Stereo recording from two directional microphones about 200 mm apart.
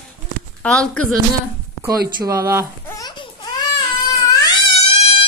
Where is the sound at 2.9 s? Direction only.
20° left (ahead or behind).